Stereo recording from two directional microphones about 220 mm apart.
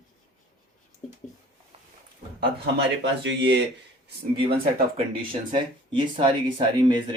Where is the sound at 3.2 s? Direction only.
55° right (ahead or behind).